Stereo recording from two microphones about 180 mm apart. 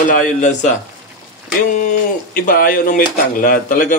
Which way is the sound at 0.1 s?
45° left (ahead or behind).